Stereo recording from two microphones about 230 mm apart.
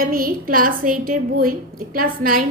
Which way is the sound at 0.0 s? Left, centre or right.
Right.